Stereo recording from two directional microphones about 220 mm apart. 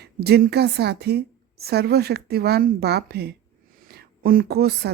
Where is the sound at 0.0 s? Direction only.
45° right (ahead or behind).